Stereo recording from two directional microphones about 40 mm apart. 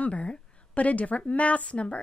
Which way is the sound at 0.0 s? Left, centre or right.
Left.